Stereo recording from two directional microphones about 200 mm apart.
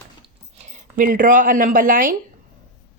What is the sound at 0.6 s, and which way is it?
Speech, 40° right (ahead or behind).